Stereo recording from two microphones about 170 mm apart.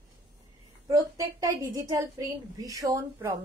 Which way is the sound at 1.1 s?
20° right (ahead or behind).